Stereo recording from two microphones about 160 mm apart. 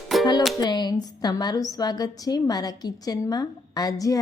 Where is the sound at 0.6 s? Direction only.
25° left (ahead or behind).